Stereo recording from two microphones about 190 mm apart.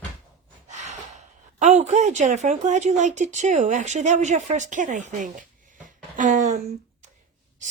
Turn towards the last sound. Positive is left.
turn(degrees=-40)  # may be behind; listen again after turning